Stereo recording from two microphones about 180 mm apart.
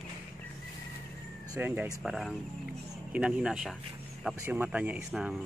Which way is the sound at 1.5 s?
10° right (ahead or behind).